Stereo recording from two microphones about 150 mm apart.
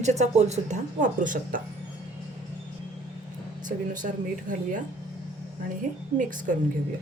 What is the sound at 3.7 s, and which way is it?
Speech, 60° right (ahead or behind).